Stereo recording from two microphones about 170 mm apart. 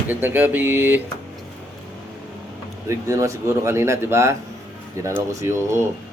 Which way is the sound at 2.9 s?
20° right (ahead or behind).